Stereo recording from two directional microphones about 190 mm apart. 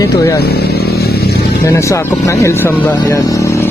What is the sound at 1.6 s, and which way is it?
Speech, 15° left (ahead or behind).